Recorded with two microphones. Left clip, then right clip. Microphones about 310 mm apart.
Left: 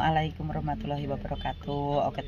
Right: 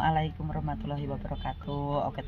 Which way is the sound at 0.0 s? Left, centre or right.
Centre.